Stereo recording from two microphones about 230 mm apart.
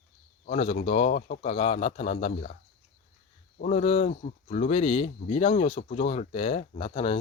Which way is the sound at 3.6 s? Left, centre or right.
Left.